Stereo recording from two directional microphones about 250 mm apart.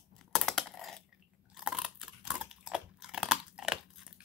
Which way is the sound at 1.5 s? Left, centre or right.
Centre.